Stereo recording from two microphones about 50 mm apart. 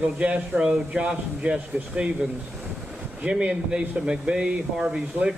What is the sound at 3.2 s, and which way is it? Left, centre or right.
Speech, right.